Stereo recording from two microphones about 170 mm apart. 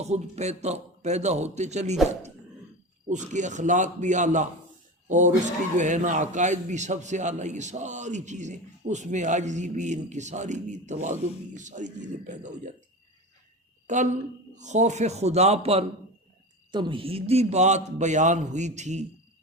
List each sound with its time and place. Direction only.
0.0 s a man's voice: 40° right (ahead or behind)
3.1 s a man's voice: 45° right (ahead or behind)
13.8 s a man's voice: 45° right (ahead or behind)